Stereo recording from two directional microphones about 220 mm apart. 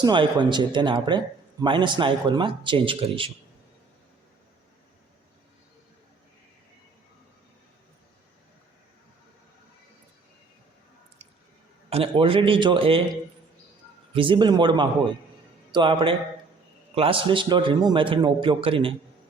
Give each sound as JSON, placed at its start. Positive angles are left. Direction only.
{"t": 0.0, "sound": "speech", "side_deg": -20}
{"t": 11.9, "sound": "speech", "side_deg": -25}
{"t": 14.1, "sound": "speech", "side_deg": -25}